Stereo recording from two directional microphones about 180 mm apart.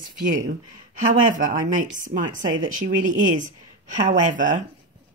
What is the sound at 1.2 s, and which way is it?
Speech, 50° right (ahead or behind).